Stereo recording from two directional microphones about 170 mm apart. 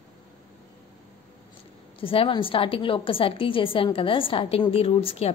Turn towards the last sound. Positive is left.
turn(degrees=35)  # may be behind; listen again after turning